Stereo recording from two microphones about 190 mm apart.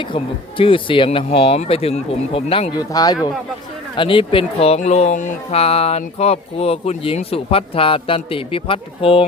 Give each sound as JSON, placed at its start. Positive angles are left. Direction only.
{"t": 0.0, "sound": "speech", "side_deg": 25}